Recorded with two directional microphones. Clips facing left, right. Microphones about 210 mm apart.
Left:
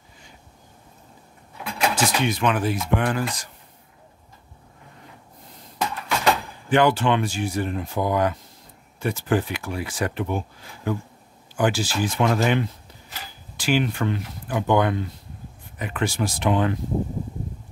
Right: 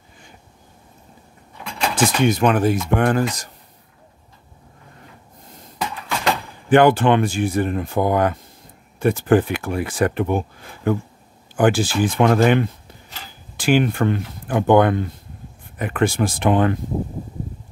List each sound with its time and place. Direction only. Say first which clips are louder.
2.0 s speech: right 10 dB; 45° right (ahead or behind)
5.8 s a sound: even; centre (ahead or behind)
6.7 s speech: right 5 dB; 55° right (ahead or behind)